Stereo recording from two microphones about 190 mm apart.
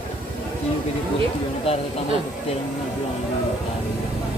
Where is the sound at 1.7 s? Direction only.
30° left (ahead or behind).